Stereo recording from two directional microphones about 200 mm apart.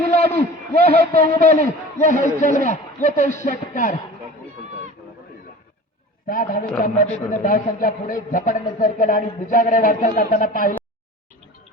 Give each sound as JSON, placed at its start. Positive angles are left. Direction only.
{"t": 0.1, "sound": "a sound", "side_deg": 35}
{"t": 0.9, "sound": "a man's voice", "side_deg": 30}
{"t": 6.2, "sound": "a man's voice", "side_deg": 45}